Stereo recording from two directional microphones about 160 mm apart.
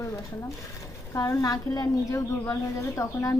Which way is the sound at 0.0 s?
20° left (ahead or behind).